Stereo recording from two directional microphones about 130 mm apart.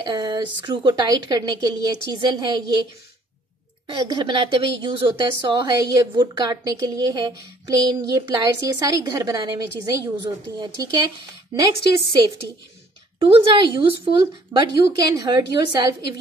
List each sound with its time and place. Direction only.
0.0 s a woman's voice: 30° right (ahead or behind)
3.8 s a woman's voice: 30° right (ahead or behind)
13.2 s a woman's voice: 40° right (ahead or behind)